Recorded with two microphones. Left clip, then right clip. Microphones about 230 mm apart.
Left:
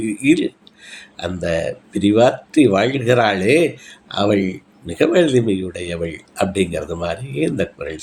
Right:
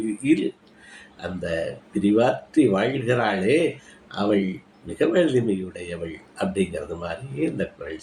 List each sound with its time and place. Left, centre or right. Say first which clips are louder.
0.2 s speech: left 6 dB; left